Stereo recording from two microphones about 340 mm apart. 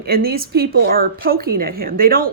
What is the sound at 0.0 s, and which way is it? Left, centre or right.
Speech, right.